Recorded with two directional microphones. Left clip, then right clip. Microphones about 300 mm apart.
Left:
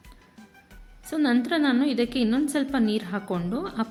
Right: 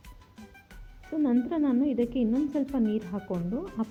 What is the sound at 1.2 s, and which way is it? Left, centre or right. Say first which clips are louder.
Speech: left 4 dB; centre.